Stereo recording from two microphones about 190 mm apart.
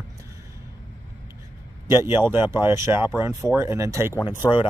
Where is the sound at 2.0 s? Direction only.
10° right (ahead or behind).